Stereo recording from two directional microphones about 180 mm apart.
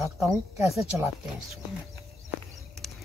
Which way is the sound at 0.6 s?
15° right (ahead or behind).